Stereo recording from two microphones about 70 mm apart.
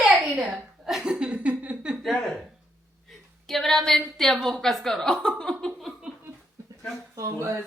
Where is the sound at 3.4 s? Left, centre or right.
Centre.